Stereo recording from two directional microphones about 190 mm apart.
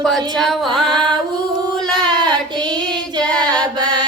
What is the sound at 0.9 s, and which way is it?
Music, 25° right (ahead or behind).